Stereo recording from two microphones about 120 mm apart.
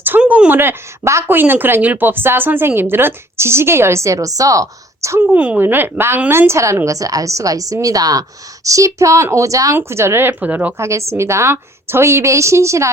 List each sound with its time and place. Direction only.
0.0 s speech: 15° right (ahead or behind)